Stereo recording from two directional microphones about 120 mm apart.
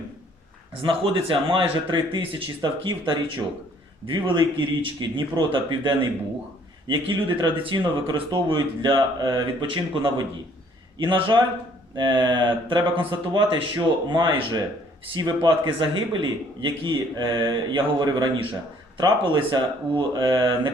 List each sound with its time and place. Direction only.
1.3 s speech: 45° right (ahead or behind)